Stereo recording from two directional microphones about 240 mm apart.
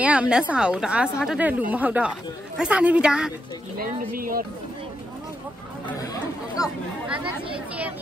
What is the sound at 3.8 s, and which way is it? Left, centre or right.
Speech, right.